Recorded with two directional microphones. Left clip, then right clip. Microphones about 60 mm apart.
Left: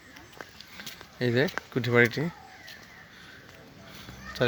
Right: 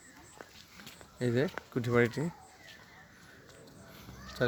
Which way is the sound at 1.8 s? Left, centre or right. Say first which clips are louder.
Left 6 dB; centre.